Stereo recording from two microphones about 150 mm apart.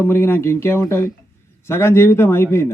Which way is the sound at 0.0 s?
15° left (ahead or behind).